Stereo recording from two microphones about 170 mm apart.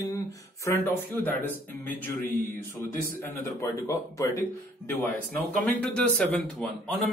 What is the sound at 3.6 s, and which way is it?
Speech, 20° left (ahead or behind).